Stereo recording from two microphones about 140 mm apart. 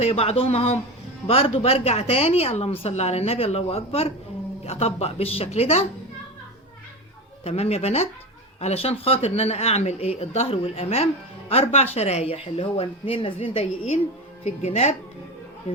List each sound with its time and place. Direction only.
0.0 s speech: 45° left (ahead or behind)
7.4 s speech: 45° left (ahead or behind)
14.4 s speech: 50° left (ahead or behind)